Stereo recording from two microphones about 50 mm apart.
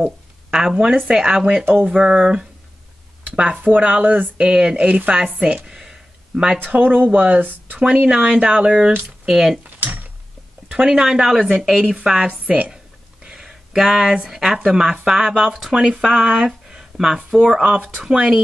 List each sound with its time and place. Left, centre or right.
0.5 s speech: centre
1.6 s speech: right
1.9 s speech: centre
3.3 s speech: right
4.4 s speech: centre
4.8 s speech: right
5.7 s a sound: centre
6.6 s speech: right; by 9.6 s centre
10.7 s speech: right
12.4 s speech: right
12.7 s speech: centre